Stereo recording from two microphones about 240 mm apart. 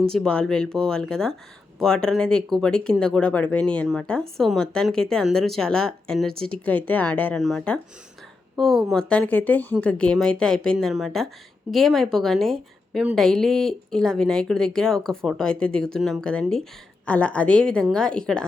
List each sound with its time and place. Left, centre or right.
0.1 s speech: centre